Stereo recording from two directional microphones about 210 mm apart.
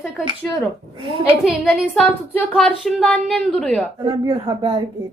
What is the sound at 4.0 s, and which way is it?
Speech, 25° right (ahead or behind).